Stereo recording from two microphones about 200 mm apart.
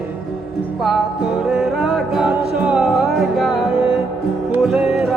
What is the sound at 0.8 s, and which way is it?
Music, centre (ahead or behind).